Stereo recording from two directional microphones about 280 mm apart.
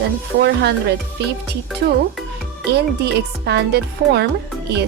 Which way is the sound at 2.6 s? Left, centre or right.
Right.